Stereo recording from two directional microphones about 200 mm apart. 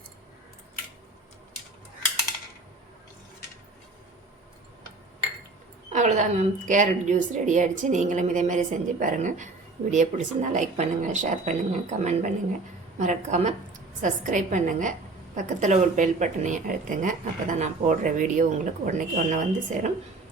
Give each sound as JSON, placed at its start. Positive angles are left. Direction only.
{"t": 5.9, "sound": "speech", "side_deg": -35}